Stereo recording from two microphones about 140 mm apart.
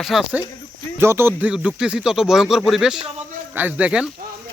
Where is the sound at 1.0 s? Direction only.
15° right (ahead or behind).